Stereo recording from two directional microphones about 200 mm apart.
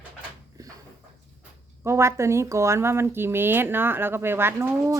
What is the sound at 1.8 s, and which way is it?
Speech, 15° right (ahead or behind).